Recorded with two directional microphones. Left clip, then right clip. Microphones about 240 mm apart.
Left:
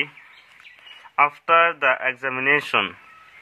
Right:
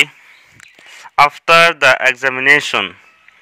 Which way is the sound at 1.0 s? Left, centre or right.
Right.